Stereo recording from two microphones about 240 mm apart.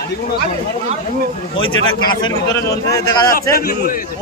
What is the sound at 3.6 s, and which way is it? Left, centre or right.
Speech, left.